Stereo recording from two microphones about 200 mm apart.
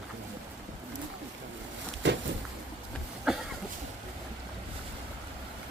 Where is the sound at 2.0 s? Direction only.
65° right (ahead or behind).